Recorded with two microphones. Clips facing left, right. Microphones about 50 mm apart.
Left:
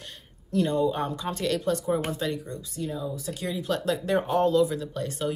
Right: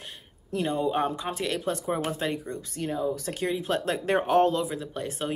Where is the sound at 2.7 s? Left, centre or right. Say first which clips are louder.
Right 4 dB; right.